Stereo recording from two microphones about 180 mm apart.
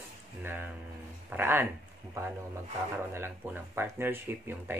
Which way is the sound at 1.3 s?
10° right (ahead or behind).